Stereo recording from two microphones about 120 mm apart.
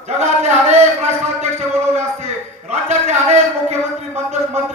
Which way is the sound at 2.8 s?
70° right (ahead or behind).